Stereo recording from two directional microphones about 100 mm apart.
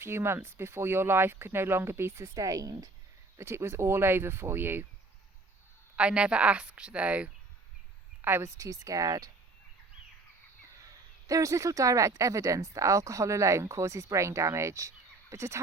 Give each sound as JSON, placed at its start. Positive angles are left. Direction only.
{"t": 0.0, "sound": "speech", "side_deg": -25}
{"t": 3.3, "sound": "speech", "side_deg": -25}
{"t": 6.0, "sound": "a woman's voice", "side_deg": -10}
{"t": 8.2, "sound": "speech", "side_deg": -25}
{"t": 11.3, "sound": "speech", "side_deg": -35}